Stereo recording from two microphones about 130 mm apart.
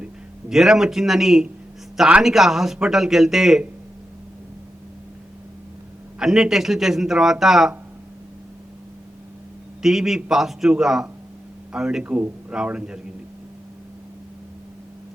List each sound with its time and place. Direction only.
0.5 s speech: 5° right (ahead or behind)
6.1 s speech: 5° right (ahead or behind)
9.8 s a man's voice: 5° right (ahead or behind)